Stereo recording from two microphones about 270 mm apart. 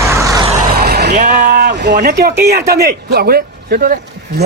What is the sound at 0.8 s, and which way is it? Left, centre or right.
Speech, right.